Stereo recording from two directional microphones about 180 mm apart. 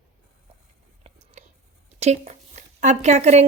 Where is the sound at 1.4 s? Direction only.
40° right (ahead or behind).